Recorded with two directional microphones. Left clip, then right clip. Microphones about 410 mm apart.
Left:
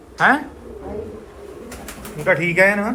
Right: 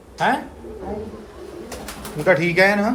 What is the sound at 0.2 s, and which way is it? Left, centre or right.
Speech, centre.